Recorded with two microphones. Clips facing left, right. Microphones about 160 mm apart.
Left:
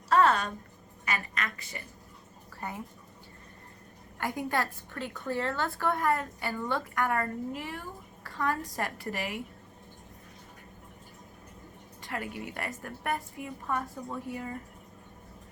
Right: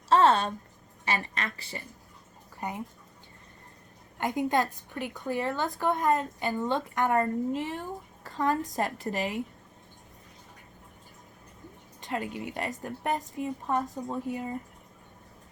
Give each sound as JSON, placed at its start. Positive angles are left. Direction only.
{"t": 0.1, "sound": "a sound", "side_deg": -25}
{"t": 1.0, "sound": "a woman's voice", "side_deg": -30}
{"t": 2.6, "sound": "speech", "side_deg": -20}
{"t": 4.2, "sound": "a woman's voice", "side_deg": -20}
{"t": 12.0, "sound": "a woman's voice", "side_deg": -20}